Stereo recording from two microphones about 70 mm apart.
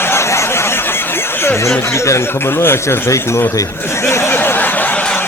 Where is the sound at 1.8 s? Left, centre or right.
Left.